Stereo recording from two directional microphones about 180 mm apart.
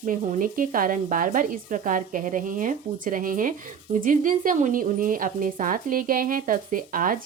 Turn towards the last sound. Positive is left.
turn(degrees=-50)  # may be behind; listen again after turning